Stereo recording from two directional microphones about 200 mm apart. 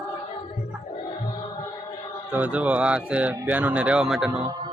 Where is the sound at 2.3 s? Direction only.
5° right (ahead or behind).